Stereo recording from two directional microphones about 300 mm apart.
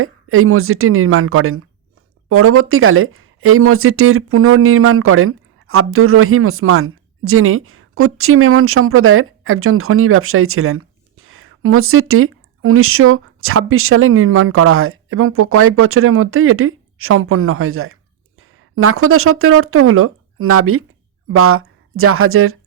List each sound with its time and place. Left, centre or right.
0.0 s speech: right